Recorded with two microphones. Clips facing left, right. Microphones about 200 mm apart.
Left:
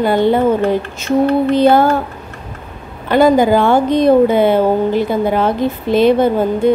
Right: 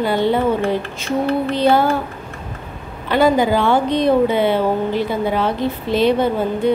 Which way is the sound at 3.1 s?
45° left (ahead or behind).